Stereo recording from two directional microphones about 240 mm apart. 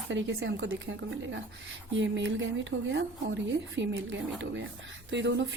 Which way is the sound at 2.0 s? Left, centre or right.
Right.